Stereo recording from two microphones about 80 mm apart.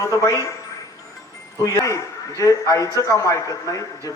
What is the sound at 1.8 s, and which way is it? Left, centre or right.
A man's voice, left.